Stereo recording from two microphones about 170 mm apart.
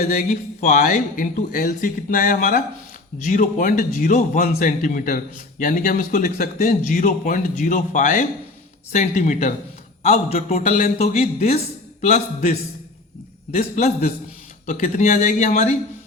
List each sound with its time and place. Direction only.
0.7 s speech: 60° left (ahead or behind); by 12.5 s 40° left (ahead or behind)
13.6 s speech: 40° left (ahead or behind)
14.7 s speech: 50° left (ahead or behind)